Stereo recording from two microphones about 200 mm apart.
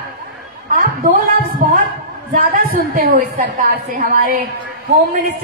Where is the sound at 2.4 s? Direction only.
50° right (ahead or behind).